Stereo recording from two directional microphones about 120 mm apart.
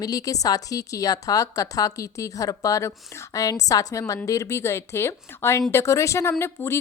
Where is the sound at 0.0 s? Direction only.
30° left (ahead or behind).